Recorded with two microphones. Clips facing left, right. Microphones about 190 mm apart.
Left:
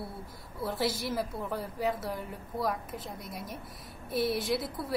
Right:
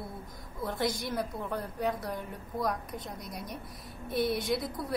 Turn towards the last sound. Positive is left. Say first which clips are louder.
# even
turn(degrees=0)  # may be behind; listen again after turning